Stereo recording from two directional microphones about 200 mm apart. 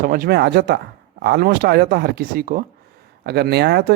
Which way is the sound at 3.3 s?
55° right (ahead or behind).